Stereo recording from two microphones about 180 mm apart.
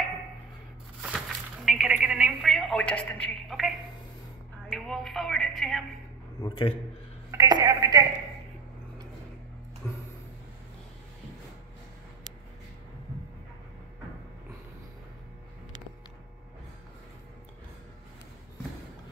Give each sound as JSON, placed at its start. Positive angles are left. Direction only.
{"t": 1.7, "sound": "telephone", "side_deg": -5}
{"t": 4.6, "sound": "a woman's voice", "side_deg": 0}
{"t": 6.4, "sound": "a man's voice", "side_deg": 25}
{"t": 7.2, "sound": "speech", "side_deg": -20}
{"t": 9.8, "sound": "a sound", "side_deg": 10}